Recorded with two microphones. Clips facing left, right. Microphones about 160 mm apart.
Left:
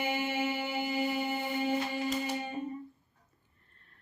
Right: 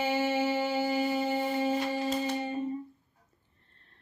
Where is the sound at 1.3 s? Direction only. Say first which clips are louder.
Right 3 dB; 30° right (ahead or behind).